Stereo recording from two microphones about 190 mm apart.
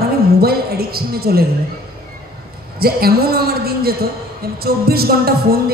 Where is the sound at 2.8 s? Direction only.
55° right (ahead or behind).